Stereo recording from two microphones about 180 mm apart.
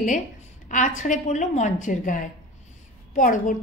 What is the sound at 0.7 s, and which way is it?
A woman's voice, 45° left (ahead or behind).